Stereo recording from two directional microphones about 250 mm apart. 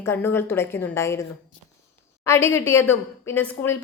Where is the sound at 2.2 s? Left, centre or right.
Centre.